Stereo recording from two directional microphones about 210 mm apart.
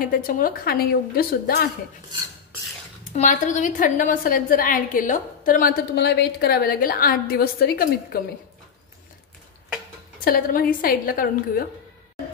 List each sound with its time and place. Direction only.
0.0 s a woman's voice: 40° left (ahead or behind)
3.1 s a woman's voice: 35° left (ahead or behind)
10.2 s a woman's voice: 45° left (ahead or behind)